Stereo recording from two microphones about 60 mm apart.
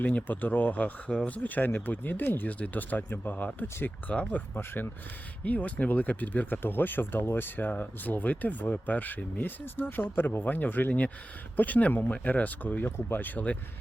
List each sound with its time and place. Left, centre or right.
0.0 s speech: left